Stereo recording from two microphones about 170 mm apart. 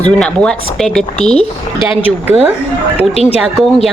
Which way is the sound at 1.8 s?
10° right (ahead or behind).